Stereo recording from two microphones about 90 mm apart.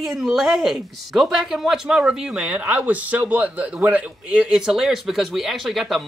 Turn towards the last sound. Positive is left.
turn(degrees=0)  # may be behind; listen again after turning